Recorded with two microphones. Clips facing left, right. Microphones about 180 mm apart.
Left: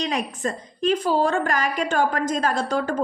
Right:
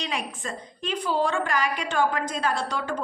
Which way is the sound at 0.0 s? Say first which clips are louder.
Left 6 dB; 40° left (ahead or behind).